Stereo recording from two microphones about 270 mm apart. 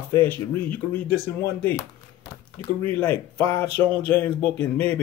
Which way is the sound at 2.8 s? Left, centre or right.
Centre.